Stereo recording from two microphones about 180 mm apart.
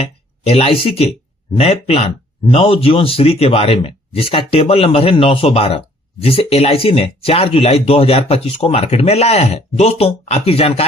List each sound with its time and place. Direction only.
0.0 s speech: 35° left (ahead or behind)